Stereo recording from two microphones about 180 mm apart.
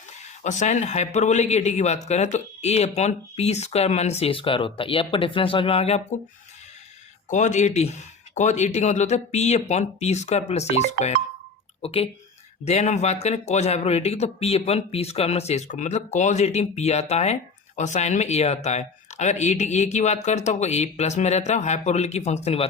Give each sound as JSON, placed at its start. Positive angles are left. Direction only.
{"t": 0.4, "sound": "speech", "side_deg": 40}
{"t": 7.3, "sound": "speech", "side_deg": 40}